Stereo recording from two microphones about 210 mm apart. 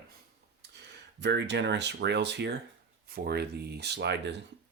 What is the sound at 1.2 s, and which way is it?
Speech, 55° right (ahead or behind).